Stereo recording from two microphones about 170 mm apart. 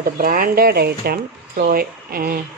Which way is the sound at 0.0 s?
55° right (ahead or behind).